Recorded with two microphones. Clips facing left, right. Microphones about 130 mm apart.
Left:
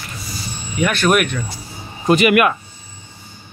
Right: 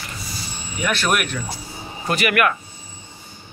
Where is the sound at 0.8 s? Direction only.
Centre (ahead or behind).